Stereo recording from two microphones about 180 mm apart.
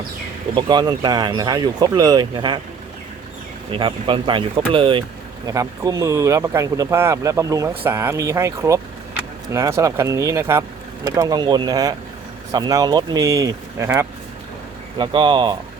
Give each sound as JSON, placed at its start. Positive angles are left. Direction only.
{"t": 0.5, "sound": "speech", "side_deg": -25}
{"t": 3.7, "sound": "speech", "side_deg": -30}
{"t": 14.9, "sound": "speech", "side_deg": -25}